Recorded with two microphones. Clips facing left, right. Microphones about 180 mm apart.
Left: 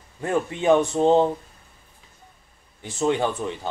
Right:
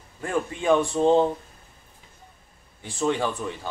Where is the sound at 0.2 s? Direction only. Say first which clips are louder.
Left 3 dB; 25° left (ahead or behind).